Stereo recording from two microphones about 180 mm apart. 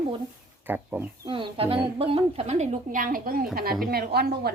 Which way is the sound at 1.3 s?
30° right (ahead or behind).